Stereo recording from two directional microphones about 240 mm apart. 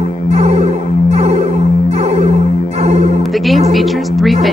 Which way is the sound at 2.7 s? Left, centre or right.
Right.